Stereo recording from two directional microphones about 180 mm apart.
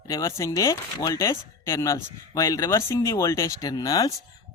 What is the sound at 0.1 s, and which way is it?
Speech, 20° left (ahead or behind).